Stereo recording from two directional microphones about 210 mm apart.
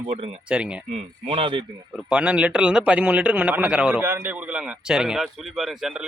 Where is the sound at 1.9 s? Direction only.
Centre (ahead or behind).